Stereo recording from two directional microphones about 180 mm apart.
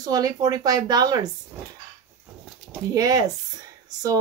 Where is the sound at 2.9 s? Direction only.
20° right (ahead or behind).